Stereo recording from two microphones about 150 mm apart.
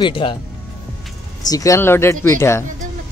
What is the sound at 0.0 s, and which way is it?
Speech, 35° left (ahead or behind).